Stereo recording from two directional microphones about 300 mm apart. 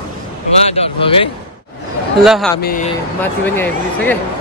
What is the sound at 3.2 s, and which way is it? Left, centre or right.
Speech, centre.